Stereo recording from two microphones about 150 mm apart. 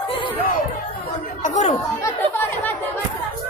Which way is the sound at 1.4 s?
50° left (ahead or behind).